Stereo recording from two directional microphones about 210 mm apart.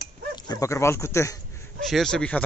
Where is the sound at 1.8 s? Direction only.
Centre (ahead or behind).